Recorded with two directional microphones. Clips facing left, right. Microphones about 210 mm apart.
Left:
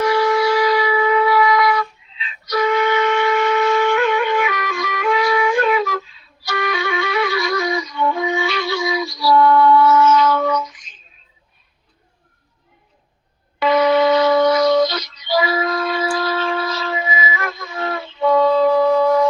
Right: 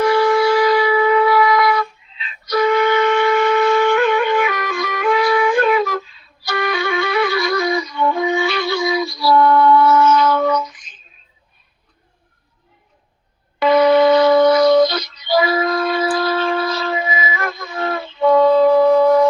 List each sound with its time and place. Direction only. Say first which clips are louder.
0.0 s wind instrument: right 2 dB; 50° right (ahead or behind)
1.7 s flute: right 1 dB; 45° right (ahead or behind)
4.1 s music: right 2 dB; 50° right (ahead or behind)
13.6 s a sound: right 3 dB; 50° right (ahead or behind)
13.9 s shofar: right 3 dB; 50° right (ahead or behind)
14.4 s music: right 3 dB; 55° right (ahead or behind)
15.8 s wind instrument: right 3 dB; 50° right (ahead or behind)
16.4 s wind instrument: right 3 dB; 35° right (ahead or behind)
16.6 s wind instrument: right 2 dB; 50° right (ahead or behind)